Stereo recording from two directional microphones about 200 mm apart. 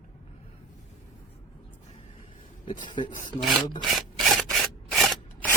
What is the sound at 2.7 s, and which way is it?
Speech, 25° left (ahead or behind).